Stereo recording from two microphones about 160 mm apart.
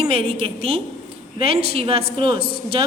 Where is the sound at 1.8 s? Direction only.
35° right (ahead or behind).